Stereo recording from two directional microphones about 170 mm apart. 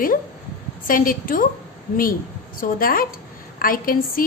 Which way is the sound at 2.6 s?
60° left (ahead or behind).